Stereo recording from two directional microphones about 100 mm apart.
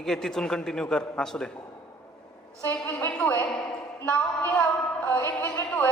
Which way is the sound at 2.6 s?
25° left (ahead or behind).